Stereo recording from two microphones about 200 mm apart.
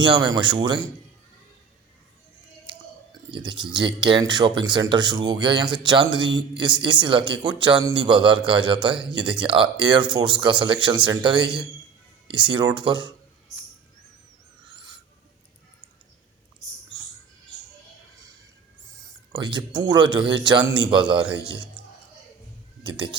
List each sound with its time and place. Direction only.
0.0 s speech: 20° right (ahead or behind)
2.6 s speech: 25° right (ahead or behind)
19.3 s speech: 20° right (ahead or behind)
22.8 s speech: 25° right (ahead or behind)